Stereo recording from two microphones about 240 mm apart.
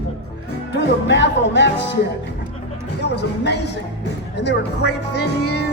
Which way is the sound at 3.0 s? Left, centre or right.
Left.